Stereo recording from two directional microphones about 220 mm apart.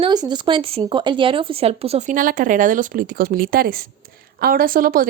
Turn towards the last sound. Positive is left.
turn(degrees=-40)  # may be behind; listen again after turning